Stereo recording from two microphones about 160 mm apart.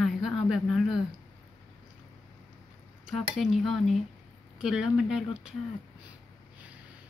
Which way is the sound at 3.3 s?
Centre (ahead or behind).